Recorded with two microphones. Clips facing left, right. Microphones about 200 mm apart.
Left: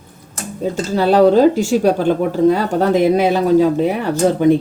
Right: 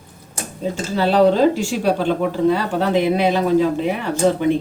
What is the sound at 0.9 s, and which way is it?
Speech, 45° left (ahead or behind).